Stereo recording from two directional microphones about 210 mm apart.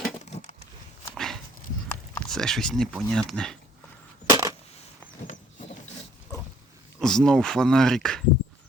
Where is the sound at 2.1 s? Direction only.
5° left (ahead or behind).